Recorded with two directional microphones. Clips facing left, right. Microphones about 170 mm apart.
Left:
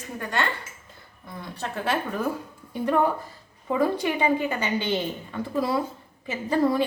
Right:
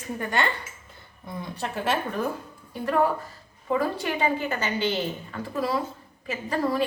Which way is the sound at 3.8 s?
20° left (ahead or behind).